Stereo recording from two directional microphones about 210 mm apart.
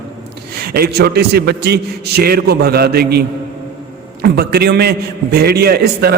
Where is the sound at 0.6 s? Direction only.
45° right (ahead or behind).